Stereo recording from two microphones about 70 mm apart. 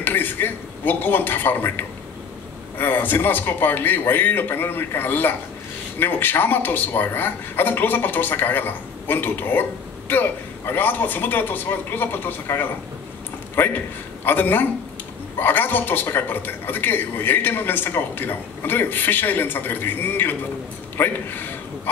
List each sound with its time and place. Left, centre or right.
0.0 s speech: left
14.2 s speech: left